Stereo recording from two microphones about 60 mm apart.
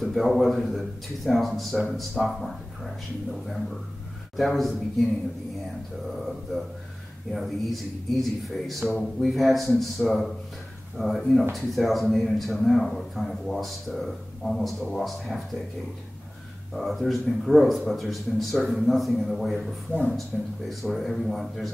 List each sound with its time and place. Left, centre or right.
0.0 s a man's voice: centre
6.0 s a man's voice: centre
16.7 s a man's voice: centre